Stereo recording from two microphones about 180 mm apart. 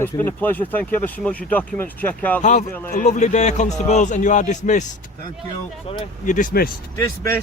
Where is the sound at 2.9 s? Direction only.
40° left (ahead or behind).